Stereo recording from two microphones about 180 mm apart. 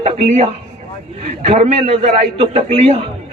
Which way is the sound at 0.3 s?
40° right (ahead or behind).